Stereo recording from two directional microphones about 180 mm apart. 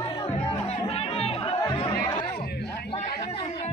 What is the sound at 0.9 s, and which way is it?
Music, 35° left (ahead or behind).